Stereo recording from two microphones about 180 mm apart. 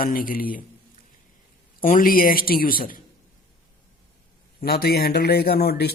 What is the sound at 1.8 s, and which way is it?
A man's voice, 50° left (ahead or behind).